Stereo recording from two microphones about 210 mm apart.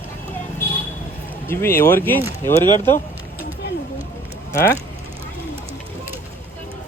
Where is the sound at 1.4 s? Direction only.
10° left (ahead or behind).